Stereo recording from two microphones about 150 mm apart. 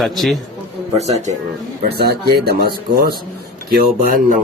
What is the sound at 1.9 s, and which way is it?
Speech, 90° right.